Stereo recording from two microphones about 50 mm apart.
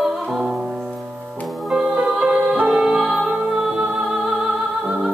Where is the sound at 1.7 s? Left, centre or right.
Centre.